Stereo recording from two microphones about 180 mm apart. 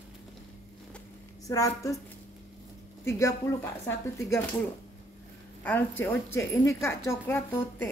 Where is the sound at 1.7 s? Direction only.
15° left (ahead or behind).